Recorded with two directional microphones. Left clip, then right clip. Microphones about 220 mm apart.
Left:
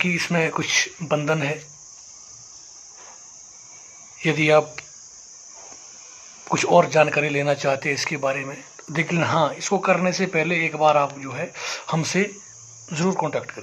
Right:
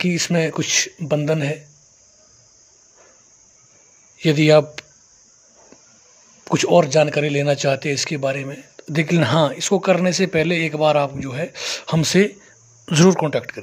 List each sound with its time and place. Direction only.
0.0 s speech: 40° right (ahead or behind)
4.3 s speech: 45° right (ahead or behind)
6.4 s speech: 40° right (ahead or behind)